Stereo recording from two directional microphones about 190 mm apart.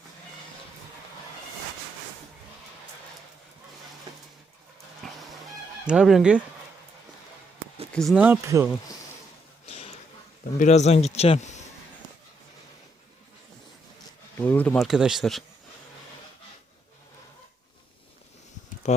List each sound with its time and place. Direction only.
5.0 s fowl: centre (ahead or behind)
5.8 s speech: 5° right (ahead or behind)
7.9 s speech: centre (ahead or behind)
9.6 s a sound: 35° left (ahead or behind)
10.6 s speech: 35° left (ahead or behind)
14.3 s speech: 10° left (ahead or behind)
14.8 s speech: 5° right (ahead or behind)
18.8 s a sound: 35° left (ahead or behind)